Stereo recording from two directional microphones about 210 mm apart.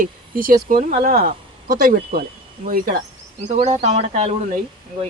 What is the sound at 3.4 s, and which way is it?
Speech, 30° right (ahead or behind).